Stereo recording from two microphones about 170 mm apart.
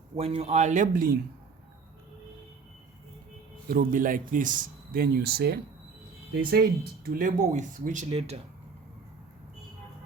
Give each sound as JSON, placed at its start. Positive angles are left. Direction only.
{"t": 0.2, "sound": "speech", "side_deg": -35}
{"t": 3.7, "sound": "speech", "side_deg": -55}